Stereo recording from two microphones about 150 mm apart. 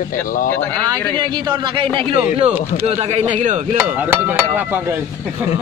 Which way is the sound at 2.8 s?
45° right (ahead or behind).